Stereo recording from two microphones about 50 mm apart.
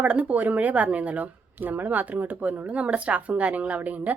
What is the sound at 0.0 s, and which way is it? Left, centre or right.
Speech, right.